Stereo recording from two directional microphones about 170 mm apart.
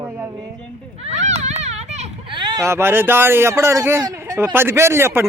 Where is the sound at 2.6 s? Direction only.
15° right (ahead or behind).